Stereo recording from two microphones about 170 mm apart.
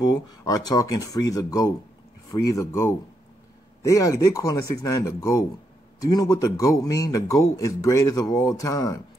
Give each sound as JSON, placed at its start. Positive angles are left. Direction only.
{"t": 0.0, "sound": "speech", "side_deg": 25}